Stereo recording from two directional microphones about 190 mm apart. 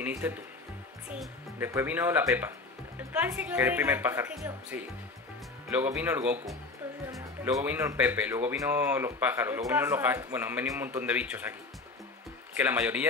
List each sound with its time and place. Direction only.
0.0 s speech: 10° right (ahead or behind)
12.5 s speech: 10° right (ahead or behind)